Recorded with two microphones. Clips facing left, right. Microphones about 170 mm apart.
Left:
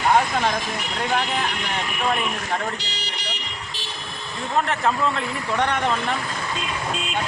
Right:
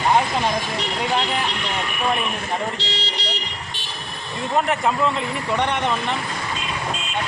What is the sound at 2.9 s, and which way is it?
Car alarm, 30° right (ahead or behind).